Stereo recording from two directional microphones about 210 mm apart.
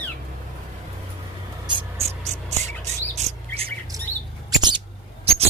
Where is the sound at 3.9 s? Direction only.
15° right (ahead or behind).